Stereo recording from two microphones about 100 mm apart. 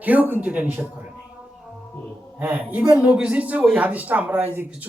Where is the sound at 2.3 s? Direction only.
15° right (ahead or behind).